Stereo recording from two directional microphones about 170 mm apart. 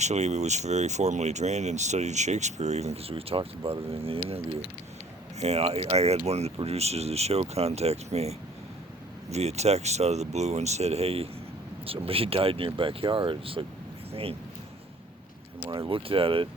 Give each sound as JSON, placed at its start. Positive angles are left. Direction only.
{"t": 0.0, "sound": "speech", "side_deg": -40}
{"t": 5.4, "sound": "speech", "side_deg": -40}
{"t": 15.7, "sound": "speech", "side_deg": -30}